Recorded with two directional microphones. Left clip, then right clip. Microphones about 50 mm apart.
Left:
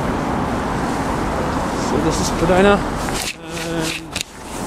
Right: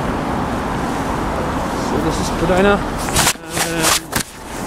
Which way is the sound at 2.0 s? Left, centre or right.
Left.